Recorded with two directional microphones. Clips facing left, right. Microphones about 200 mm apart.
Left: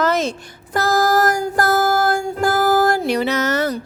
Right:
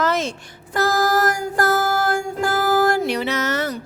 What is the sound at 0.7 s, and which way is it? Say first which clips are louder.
Music: left 2 dB; 40° left (ahead or behind).